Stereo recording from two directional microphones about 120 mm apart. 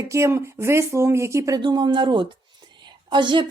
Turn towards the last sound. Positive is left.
turn(degrees=-40)  # may be behind; listen again after turning